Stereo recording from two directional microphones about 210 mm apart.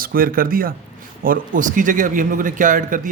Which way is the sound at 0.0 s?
45° right (ahead or behind).